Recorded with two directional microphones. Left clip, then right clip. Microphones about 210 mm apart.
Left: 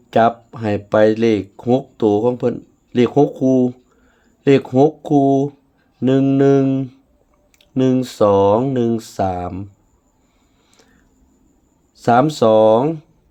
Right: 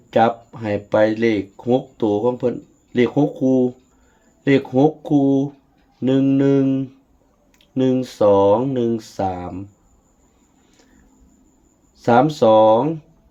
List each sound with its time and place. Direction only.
0.1 s speech: 45° left (ahead or behind)
11.9 s speech: 45° left (ahead or behind)